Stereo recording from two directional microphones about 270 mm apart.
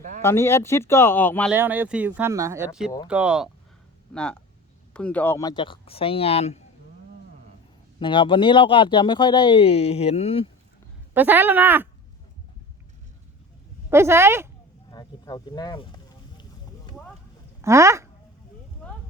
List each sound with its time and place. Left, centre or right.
0.2 s speech: centre
1.5 s speech: centre; by 6.6 s left
7.9 s speech: centre
11.1 s speech: centre
13.9 s speech: centre
14.8 s a sound: centre
17.6 s speech: centre
18.8 s clip-clop: centre